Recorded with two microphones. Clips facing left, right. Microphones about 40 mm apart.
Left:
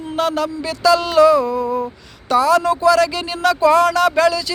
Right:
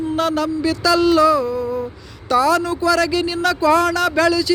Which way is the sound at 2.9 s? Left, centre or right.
Left.